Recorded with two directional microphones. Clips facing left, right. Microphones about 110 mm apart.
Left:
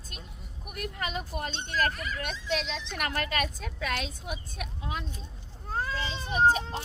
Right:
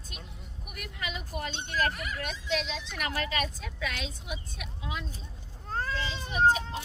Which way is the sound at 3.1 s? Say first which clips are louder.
Even; 50° left (ahead or behind).